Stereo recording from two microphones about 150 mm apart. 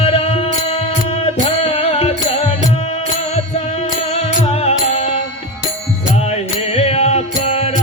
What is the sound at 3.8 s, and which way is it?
Music, 40° left (ahead or behind).